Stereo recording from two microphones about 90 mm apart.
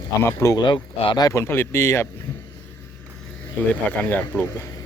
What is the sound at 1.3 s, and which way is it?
Speech, 30° left (ahead or behind).